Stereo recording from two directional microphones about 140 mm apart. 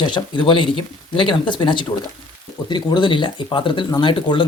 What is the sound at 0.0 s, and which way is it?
Speech, 35° left (ahead or behind).